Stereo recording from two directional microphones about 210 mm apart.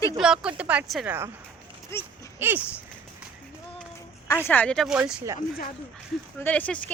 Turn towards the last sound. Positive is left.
turn(degrees=5)  # may be behind; listen again after turning